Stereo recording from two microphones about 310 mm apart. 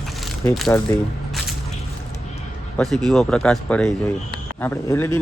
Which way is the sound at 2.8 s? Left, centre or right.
Centre.